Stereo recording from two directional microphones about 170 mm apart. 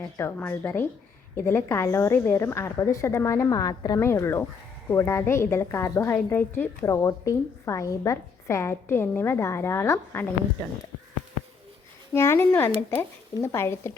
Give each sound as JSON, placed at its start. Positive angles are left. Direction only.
{"t": 0.2, "sound": "a woman's voice", "side_deg": 15}
{"t": 12.1, "sound": "a woman's voice", "side_deg": 15}